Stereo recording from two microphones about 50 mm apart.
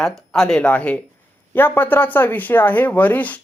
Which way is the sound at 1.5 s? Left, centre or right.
Left.